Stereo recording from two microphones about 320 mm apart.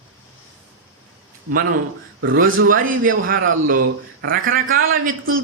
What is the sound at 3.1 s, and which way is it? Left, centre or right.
A man's voice, right.